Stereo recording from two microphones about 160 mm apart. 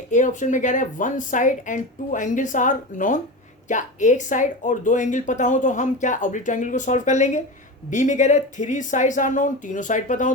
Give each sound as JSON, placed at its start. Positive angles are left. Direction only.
{"t": 0.1, "sound": "speech", "side_deg": 50}